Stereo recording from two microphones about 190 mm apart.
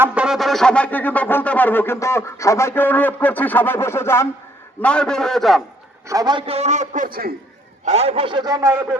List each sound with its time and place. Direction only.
0.0 s a sound: 5° right (ahead or behind); by 4.3 s 15° left (ahead or behind)
4.8 s a man's voice: 5° left (ahead or behind)
6.1 s a man's voice: 20° right (ahead or behind); by 7.3 s 50° right (ahead or behind)
7.9 s a man's voice: 35° right (ahead or behind); by 9.0 s 15° right (ahead or behind)